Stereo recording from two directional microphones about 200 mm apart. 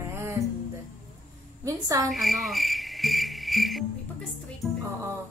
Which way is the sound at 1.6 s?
15° right (ahead or behind).